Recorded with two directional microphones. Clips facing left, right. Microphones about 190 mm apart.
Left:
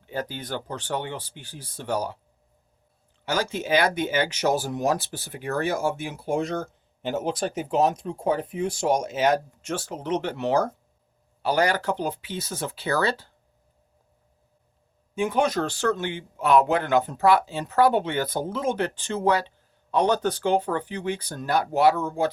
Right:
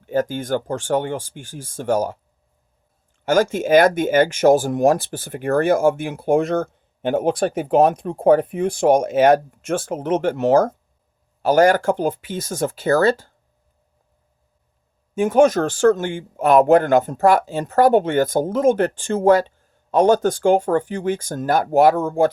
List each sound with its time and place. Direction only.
0.0 s speech: 45° right (ahead or behind)
3.2 s speech: 50° right (ahead or behind)
15.1 s speech: 45° right (ahead or behind)